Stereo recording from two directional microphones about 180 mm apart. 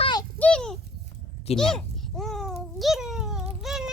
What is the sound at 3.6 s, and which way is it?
Child singing, centre (ahead or behind).